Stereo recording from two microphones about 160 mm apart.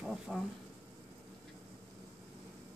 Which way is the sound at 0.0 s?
5° right (ahead or behind).